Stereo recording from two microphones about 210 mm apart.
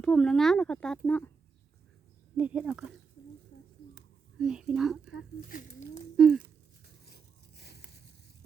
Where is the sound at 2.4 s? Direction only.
5° right (ahead or behind).